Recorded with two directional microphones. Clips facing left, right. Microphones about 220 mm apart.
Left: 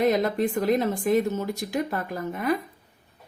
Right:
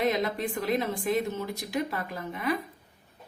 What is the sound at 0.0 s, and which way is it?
A woman's voice, 45° left (ahead or behind).